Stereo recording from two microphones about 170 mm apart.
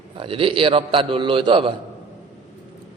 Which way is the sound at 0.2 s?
30° right (ahead or behind).